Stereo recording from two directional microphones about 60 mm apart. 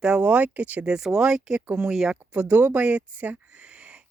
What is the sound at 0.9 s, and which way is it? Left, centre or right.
Speech, centre.